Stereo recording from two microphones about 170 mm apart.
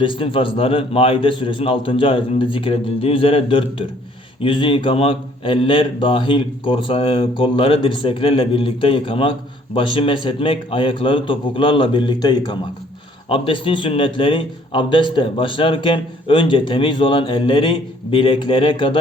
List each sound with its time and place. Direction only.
0.0 s a man's voice: 30° left (ahead or behind)